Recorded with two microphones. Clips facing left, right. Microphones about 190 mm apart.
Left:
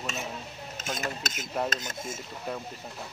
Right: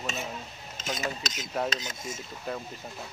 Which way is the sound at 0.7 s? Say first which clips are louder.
Right 1 dB; 55° left (ahead or behind).